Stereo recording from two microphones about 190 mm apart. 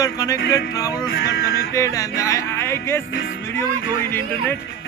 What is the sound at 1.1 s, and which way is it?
Speech, 60° left (ahead or behind).